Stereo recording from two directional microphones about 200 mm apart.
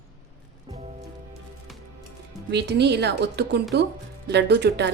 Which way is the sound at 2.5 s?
55° right (ahead or behind).